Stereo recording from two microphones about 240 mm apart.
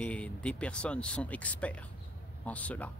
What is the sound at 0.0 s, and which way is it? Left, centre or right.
Speech, centre.